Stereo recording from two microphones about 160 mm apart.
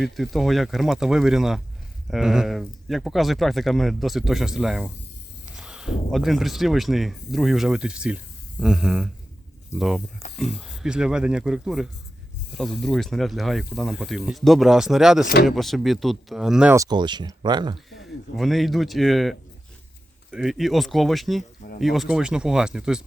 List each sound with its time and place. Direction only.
0.0 s speech: centre (ahead or behind)
16.7 s speech: 25° right (ahead or behind)
18.3 s speech: centre (ahead or behind)